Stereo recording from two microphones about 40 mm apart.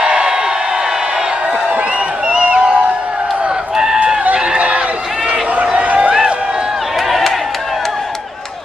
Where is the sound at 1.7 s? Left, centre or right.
Right.